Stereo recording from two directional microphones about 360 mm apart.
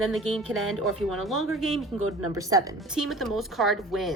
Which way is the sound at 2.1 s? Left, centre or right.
Right.